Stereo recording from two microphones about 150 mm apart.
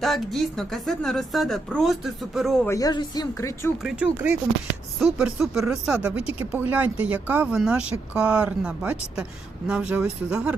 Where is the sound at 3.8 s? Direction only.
5° right (ahead or behind).